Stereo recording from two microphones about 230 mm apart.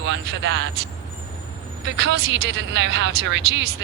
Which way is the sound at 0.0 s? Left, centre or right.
Right.